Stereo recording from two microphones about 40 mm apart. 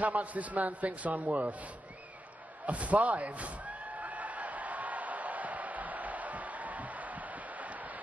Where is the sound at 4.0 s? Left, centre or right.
Right.